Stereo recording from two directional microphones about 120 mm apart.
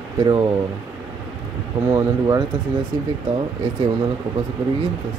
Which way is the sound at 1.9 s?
35° right (ahead or behind).